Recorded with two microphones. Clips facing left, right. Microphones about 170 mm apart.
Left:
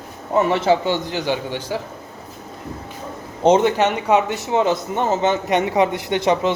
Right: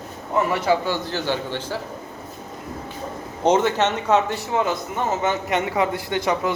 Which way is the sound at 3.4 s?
20° left (ahead or behind).